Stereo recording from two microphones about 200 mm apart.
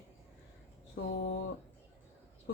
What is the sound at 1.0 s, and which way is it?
Speech, 65° left (ahead or behind).